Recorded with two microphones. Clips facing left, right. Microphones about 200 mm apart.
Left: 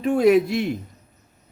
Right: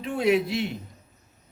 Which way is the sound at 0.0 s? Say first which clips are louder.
Left 7 dB; 45° left (ahead or behind).